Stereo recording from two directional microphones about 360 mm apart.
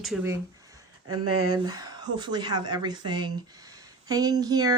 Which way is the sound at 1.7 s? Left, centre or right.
Centre.